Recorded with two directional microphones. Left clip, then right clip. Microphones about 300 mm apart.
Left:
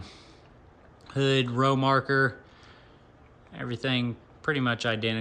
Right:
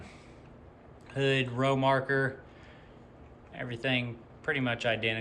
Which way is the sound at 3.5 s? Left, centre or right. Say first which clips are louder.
Left 1 dB; centre.